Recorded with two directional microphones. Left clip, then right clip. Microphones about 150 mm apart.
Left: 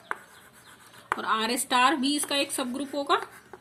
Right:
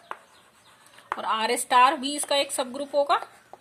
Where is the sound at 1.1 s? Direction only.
70° right (ahead or behind).